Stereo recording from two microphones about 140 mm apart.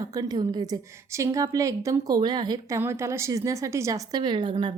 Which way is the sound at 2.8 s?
15° right (ahead or behind).